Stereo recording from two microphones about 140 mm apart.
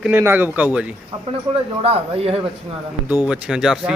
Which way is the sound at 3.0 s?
10° right (ahead or behind).